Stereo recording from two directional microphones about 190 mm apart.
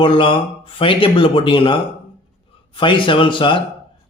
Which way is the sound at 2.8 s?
25° left (ahead or behind).